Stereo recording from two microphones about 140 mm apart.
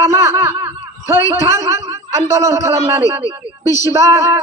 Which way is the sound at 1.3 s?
20° right (ahead or behind).